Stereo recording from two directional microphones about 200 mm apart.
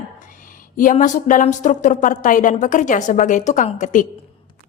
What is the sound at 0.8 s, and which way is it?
Speech, 40° left (ahead or behind).